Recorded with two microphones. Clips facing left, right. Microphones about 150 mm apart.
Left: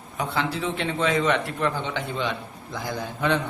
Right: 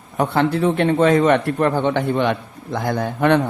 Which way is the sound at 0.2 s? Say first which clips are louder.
Right 9 dB; 55° right (ahead or behind).